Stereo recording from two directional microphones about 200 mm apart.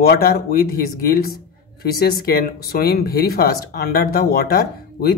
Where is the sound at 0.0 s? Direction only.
50° left (ahead or behind).